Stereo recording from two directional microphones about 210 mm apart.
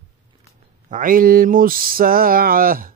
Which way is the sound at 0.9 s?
40° right (ahead or behind).